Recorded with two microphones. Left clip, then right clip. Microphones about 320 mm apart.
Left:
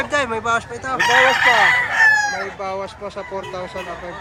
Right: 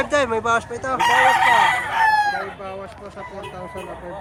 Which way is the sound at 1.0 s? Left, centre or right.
Centre.